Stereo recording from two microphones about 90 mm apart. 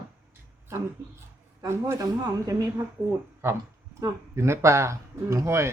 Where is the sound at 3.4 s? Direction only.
25° right (ahead or behind).